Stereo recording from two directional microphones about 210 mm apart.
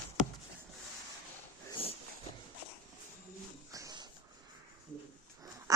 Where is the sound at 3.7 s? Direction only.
20° right (ahead or behind).